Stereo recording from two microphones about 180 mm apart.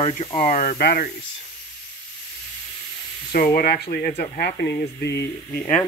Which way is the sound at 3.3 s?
55° left (ahead or behind).